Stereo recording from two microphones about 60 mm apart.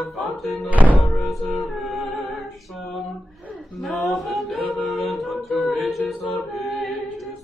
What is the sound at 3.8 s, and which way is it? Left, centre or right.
A capella, centre.